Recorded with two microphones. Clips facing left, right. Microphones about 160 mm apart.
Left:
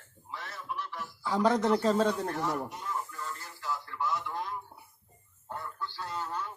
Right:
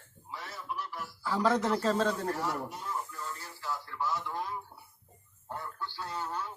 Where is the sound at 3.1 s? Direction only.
Centre (ahead or behind).